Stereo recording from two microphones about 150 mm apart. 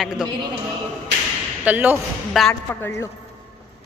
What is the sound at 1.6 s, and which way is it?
Speech, 10° right (ahead or behind).